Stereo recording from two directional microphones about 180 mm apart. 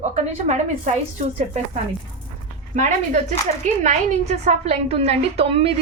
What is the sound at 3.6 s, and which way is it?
A woman's voice, 40° right (ahead or behind).